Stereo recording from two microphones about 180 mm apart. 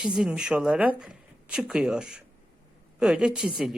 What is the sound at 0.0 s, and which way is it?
A woman's voice, 5° right (ahead or behind).